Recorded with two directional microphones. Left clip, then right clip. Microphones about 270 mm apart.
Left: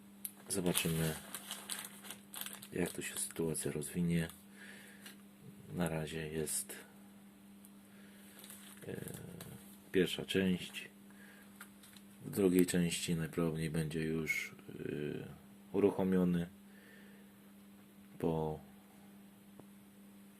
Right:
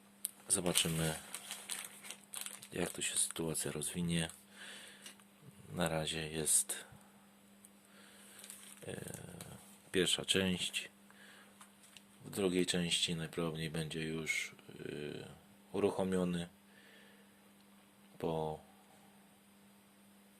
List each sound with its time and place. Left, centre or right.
0.5 s speech: centre
1.6 s crumpling: right
5.7 s speech: right
8.9 s chainsaw: right
9.9 s speech: right
12.3 s speech: centre
18.2 s speech: centre